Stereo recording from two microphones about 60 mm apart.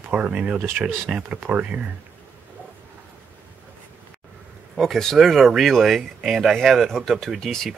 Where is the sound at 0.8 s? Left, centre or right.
Centre.